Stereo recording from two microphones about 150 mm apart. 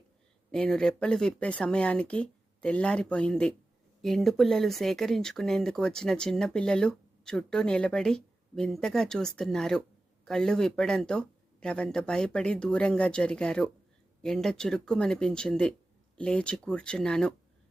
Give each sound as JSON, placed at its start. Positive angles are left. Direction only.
{"t": 0.5, "sound": "speech", "side_deg": 5}